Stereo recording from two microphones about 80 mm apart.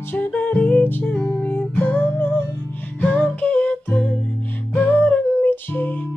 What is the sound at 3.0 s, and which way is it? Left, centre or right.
Humming, centre.